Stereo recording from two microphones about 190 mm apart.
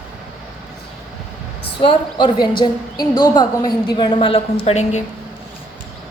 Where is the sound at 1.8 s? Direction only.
25° left (ahead or behind).